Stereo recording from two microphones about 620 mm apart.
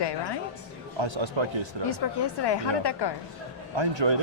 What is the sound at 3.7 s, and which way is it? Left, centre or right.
Speech, right.